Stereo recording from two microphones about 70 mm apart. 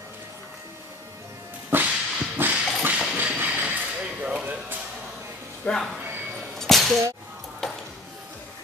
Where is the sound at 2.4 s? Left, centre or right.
Right.